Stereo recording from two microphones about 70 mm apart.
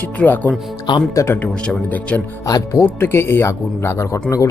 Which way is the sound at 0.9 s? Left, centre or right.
Left.